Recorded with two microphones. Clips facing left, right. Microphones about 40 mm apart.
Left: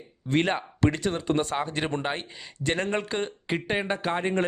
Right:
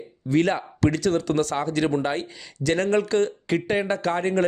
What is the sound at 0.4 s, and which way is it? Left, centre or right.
Speech, left.